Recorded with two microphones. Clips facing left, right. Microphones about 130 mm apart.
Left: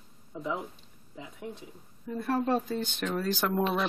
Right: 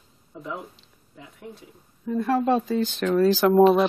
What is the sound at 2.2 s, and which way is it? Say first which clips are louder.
Speech: right 6 dB; 90° right.